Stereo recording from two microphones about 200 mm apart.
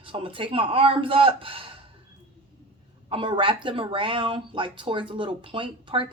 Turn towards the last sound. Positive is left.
turn(degrees=-25)  # may be behind; listen again after turning